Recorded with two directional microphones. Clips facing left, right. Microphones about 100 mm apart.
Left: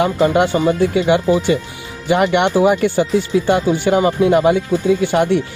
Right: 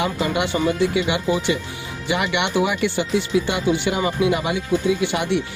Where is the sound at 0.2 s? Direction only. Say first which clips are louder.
Left 9 dB; 45° left (ahead or behind).